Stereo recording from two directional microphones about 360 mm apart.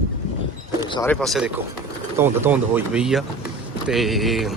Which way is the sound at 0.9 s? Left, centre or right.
Centre.